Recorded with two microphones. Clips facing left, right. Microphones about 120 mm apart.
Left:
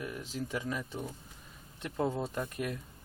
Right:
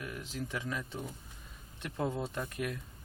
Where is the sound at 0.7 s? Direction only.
15° left (ahead or behind).